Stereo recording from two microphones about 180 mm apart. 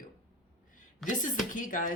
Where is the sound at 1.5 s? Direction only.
50° left (ahead or behind).